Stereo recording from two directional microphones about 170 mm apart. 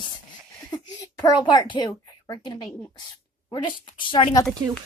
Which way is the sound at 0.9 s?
20° left (ahead or behind).